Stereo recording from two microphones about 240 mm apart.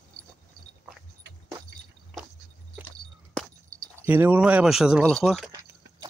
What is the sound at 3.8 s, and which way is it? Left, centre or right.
Speech, centre.